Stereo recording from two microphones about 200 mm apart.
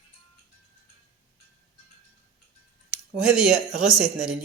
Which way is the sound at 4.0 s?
5° right (ahead or behind).